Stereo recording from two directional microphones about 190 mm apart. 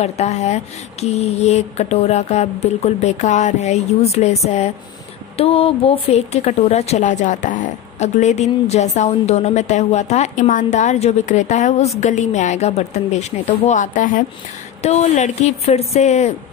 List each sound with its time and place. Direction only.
0.0 s speech: 35° left (ahead or behind)
5.4 s speech: 30° left (ahead or behind)